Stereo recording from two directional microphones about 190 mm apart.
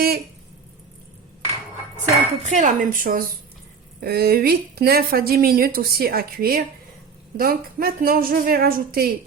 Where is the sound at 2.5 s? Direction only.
40° right (ahead or behind).